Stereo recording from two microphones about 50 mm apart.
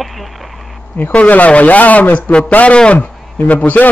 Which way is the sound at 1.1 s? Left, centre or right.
Left.